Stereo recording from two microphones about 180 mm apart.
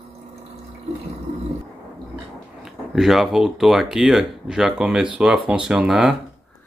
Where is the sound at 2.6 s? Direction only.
Centre (ahead or behind).